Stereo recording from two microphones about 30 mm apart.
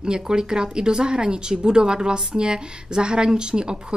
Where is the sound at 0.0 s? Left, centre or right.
Right.